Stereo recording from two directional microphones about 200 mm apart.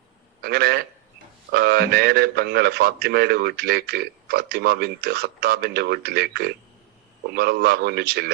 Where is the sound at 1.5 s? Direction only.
55° right (ahead or behind).